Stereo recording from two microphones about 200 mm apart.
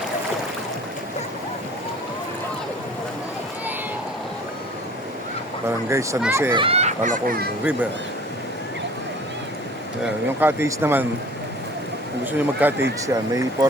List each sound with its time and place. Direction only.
5.6 s speech: 15° right (ahead or behind)
6.5 s speech: 25° right (ahead or behind); by 7.5 s 45° right (ahead or behind)
7.6 s speech: 5° right (ahead or behind)
10.0 s speech: 10° right (ahead or behind)
12.2 s speech: 10° right (ahead or behind)